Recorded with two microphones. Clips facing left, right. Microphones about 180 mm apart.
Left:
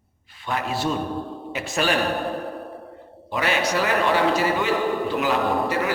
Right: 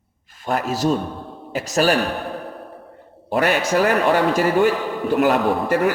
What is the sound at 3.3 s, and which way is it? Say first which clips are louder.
A man's voice: right 5 dB; 45° right (ahead or behind).